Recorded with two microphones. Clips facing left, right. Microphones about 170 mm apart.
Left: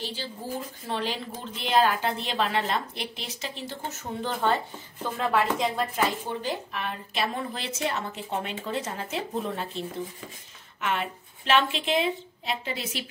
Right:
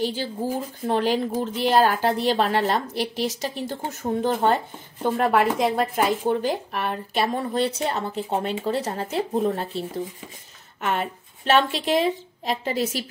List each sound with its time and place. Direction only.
0.0 s a woman's voice: 50° right (ahead or behind)